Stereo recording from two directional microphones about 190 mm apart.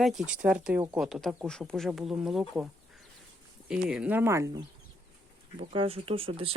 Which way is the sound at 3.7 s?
5° right (ahead or behind).